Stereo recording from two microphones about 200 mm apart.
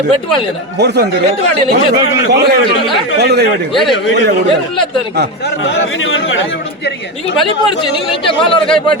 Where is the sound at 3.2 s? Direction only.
55° right (ahead or behind).